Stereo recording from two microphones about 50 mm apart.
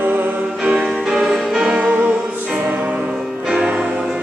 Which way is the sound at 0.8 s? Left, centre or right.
Centre.